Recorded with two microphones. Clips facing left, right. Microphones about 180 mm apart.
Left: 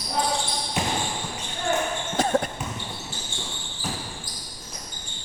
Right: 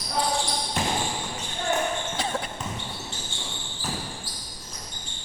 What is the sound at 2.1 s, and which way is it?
Basketball bounce, 45° left (ahead or behind).